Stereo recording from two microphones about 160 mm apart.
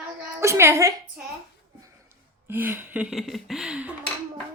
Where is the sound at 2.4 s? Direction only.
10° right (ahead or behind).